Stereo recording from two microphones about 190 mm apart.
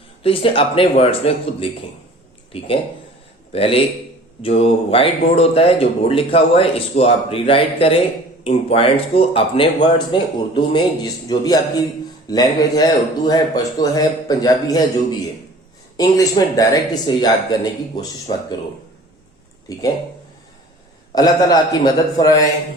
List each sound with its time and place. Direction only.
0.2 s speech: 30° left (ahead or behind)
16.0 s speech: 20° left (ahead or behind)
21.2 s speech: 20° left (ahead or behind)